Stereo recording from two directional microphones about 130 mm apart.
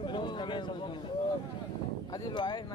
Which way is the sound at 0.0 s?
35° left (ahead or behind).